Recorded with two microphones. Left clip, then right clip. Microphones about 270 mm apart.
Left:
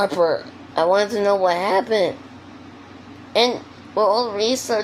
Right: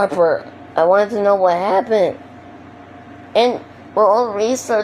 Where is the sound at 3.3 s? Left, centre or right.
Centre.